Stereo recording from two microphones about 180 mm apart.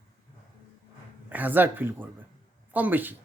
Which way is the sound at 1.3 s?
10° right (ahead or behind).